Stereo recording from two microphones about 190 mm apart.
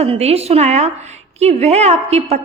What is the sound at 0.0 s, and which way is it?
Speech, 35° right (ahead or behind).